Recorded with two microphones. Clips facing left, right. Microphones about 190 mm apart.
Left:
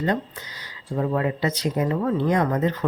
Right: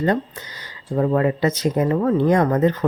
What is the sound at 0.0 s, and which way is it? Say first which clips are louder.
Speech: right 4 dB; 45° right (ahead or behind).